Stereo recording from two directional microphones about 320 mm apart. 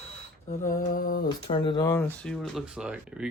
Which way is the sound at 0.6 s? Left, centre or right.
Left.